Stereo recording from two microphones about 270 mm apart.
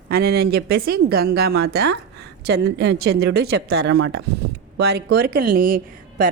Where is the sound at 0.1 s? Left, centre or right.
Right.